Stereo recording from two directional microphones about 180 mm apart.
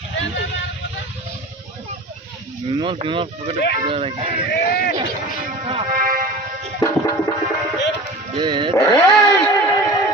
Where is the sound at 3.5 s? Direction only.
70° left (ahead or behind).